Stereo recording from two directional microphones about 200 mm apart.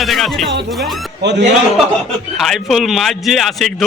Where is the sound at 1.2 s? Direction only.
60° right (ahead or behind).